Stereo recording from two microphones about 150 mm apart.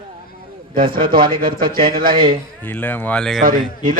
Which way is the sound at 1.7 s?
75° right (ahead or behind).